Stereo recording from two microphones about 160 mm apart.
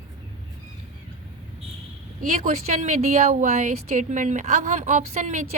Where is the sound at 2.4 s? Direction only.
45° right (ahead or behind).